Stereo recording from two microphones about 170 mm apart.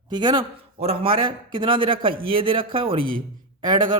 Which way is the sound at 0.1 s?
25° right (ahead or behind).